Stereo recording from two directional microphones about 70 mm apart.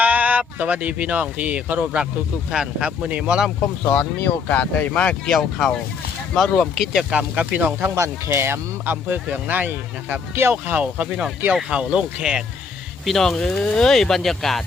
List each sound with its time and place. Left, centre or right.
0.0 s speech: right
3.9 s speech: left
5.3 s speech: centre
7.1 s speech: centre
7.9 s speech: right
8.8 s speech: right
10.5 s speech: right
13.1 s speech: centre